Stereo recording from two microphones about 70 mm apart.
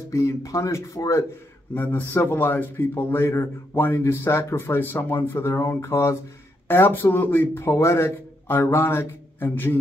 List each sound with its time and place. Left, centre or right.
0.1 s speech: left
1.8 s a man's voice: left